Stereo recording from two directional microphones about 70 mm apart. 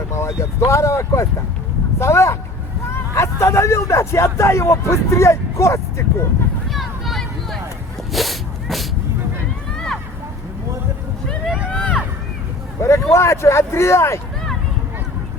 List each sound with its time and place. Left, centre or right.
0.1 s speech: left
6.7 s a sound: centre
11.7 s vehicle: centre
12.8 s speech: left